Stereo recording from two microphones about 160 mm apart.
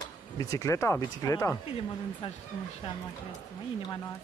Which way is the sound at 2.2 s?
40° left (ahead or behind).